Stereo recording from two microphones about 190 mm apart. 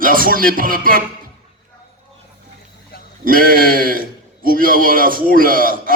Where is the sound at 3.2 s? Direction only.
50° right (ahead or behind).